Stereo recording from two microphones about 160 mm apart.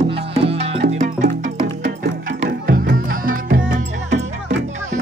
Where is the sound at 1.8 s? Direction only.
80° right; by 4.2 s 55° right (ahead or behind).